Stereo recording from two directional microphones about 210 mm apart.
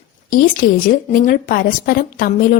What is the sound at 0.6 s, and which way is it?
Speech, 40° left (ahead or behind).